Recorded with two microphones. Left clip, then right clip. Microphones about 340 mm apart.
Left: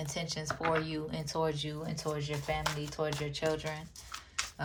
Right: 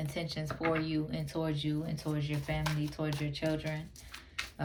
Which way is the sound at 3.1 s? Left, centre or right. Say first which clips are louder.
Left 1 dB; left.